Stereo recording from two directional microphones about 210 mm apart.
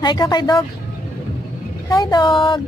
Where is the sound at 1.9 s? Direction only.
20° left (ahead or behind).